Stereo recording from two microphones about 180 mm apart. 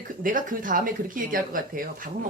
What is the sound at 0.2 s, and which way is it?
Speech, 45° right (ahead or behind).